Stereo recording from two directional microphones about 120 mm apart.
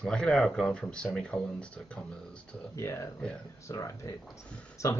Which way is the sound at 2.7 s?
25° left (ahead or behind).